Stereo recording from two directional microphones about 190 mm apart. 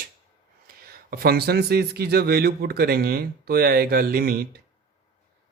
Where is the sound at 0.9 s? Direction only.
55° right (ahead or behind).